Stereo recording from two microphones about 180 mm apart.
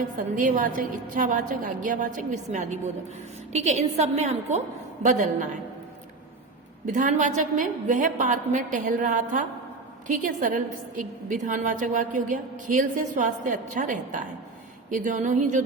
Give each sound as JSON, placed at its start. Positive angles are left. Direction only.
{"t": 0.2, "sound": "a woman's voice", "side_deg": -45}
{"t": 6.8, "sound": "a woman's voice", "side_deg": -45}